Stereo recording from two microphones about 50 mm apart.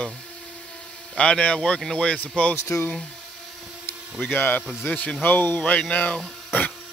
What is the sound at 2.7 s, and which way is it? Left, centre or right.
Speech, left.